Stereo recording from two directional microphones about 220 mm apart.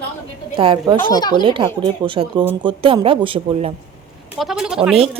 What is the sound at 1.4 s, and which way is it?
A woman's voice, 20° right (ahead or behind).